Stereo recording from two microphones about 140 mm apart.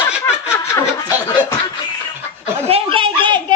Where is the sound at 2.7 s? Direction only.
40° right (ahead or behind).